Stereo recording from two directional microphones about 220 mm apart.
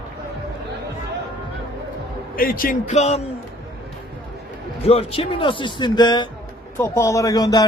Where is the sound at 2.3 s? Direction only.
40° left (ahead or behind).